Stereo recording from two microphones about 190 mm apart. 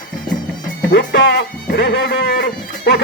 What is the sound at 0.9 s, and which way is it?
Speech, 60° left (ahead or behind).